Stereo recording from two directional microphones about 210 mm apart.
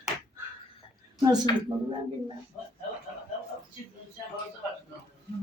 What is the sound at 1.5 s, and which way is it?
Speech, 20° left (ahead or behind).